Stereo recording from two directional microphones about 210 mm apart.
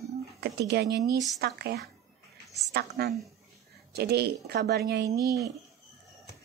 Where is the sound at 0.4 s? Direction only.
50° right (ahead or behind).